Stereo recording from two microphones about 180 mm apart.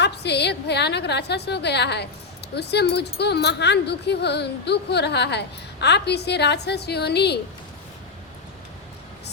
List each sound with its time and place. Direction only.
0.0 s speech: 70° left (ahead or behind)